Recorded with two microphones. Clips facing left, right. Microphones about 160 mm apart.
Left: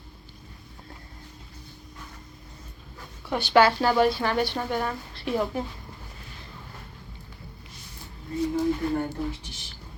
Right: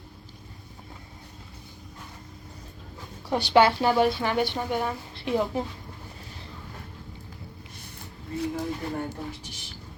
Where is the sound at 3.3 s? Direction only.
30° right (ahead or behind); by 5.0 s 10° right (ahead or behind).